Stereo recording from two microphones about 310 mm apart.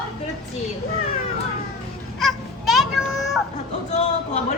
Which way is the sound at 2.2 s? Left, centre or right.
Centre.